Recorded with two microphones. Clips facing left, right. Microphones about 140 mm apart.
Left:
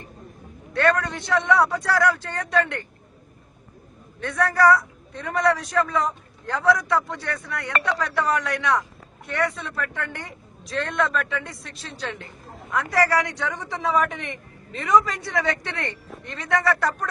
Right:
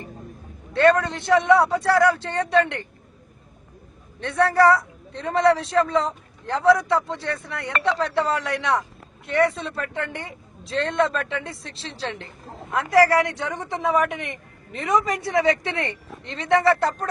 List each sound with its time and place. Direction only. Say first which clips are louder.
0.7 s speech: right 4 dB; 20° right (ahead or behind)
4.2 s speech: right 2 dB; 25° right (ahead or behind)